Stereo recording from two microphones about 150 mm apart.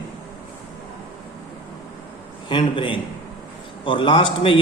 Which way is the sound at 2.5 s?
30° left (ahead or behind).